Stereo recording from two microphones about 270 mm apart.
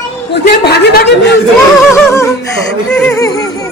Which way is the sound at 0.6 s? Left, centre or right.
Left.